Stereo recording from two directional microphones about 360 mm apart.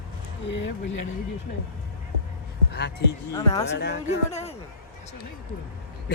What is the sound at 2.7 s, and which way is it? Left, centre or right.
Speech, left.